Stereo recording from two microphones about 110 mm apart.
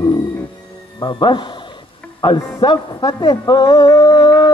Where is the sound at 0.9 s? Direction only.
45° left (ahead or behind).